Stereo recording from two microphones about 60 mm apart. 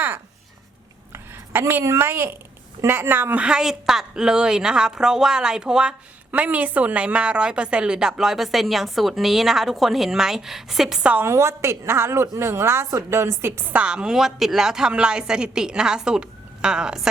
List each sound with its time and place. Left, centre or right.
1.1 s a sound: right
2.0 s a woman's voice: right
3.3 s a woman's voice: centre
6.3 s a woman's voice: right; by 11.0 s centre
11.2 s a woman's voice: right
13.7 s a woman's voice: centre